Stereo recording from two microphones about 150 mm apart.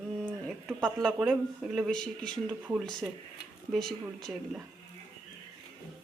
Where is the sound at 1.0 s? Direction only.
Centre (ahead or behind).